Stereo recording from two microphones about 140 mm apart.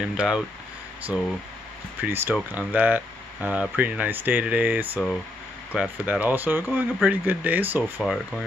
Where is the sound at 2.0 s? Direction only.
15° right (ahead or behind).